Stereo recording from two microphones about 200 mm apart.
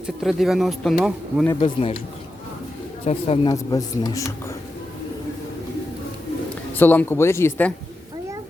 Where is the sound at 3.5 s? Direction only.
20° left (ahead or behind).